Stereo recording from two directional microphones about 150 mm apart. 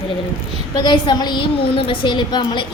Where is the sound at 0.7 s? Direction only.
30° left (ahead or behind).